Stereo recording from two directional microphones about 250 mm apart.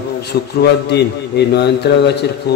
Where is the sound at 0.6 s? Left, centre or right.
Left.